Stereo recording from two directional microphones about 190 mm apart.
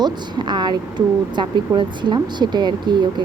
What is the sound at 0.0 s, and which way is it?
Speech, 25° right (ahead or behind).